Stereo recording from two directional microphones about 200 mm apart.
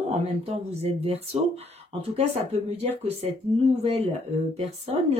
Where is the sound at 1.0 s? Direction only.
30° right (ahead or behind).